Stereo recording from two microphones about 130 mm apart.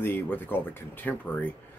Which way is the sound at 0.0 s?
15° left (ahead or behind).